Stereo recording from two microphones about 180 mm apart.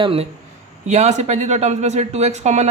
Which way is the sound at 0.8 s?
40° right (ahead or behind).